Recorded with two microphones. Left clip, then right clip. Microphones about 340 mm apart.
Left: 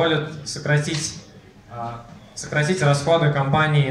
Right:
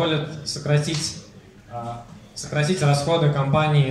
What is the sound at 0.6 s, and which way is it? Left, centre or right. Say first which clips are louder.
Speech: left 2 dB; centre.